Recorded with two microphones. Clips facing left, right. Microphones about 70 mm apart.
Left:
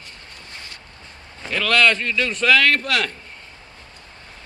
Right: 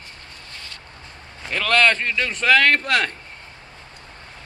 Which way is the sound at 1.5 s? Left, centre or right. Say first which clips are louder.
Even; right.